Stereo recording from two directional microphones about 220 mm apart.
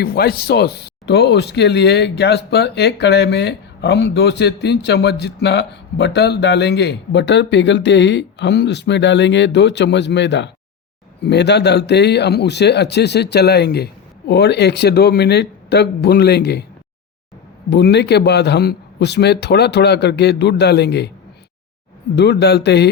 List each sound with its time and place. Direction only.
0.0 s speech: 45° left (ahead or behind)
17.7 s speech: 50° left (ahead or behind)
22.1 s speech: 50° left (ahead or behind)